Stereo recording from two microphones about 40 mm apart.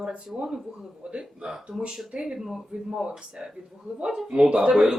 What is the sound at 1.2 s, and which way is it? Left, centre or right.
A man's voice, centre.